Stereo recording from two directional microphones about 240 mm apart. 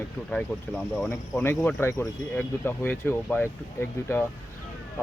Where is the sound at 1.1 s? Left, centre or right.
Centre.